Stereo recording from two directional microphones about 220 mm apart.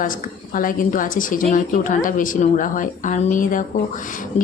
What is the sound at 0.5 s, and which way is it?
Speech, 40° left (ahead or behind).